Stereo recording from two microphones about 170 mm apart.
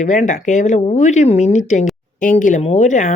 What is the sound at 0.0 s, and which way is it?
Speech, 45° left (ahead or behind).